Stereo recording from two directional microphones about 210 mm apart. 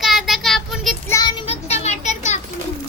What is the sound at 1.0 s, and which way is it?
Child singing, 15° left (ahead or behind).